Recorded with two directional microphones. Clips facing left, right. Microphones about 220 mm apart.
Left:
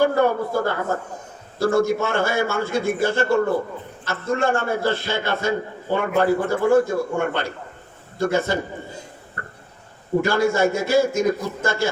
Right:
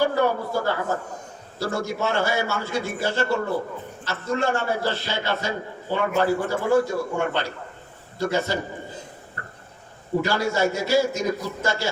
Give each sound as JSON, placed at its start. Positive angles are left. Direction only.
{"t": 0.0, "sound": "a man's voice", "side_deg": 50}
{"t": 10.2, "sound": "a man's voice", "side_deg": 50}